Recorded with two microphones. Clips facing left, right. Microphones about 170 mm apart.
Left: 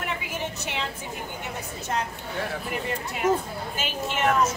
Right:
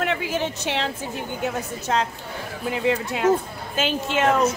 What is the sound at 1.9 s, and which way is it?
A woman's voice, 90° right.